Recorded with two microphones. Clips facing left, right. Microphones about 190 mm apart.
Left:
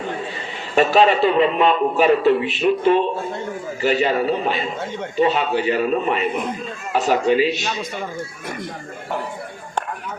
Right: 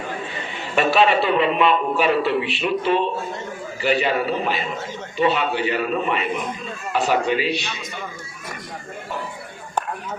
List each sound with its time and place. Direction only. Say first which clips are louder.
0.8 s speech: left 3 dB; 40° left (ahead or behind)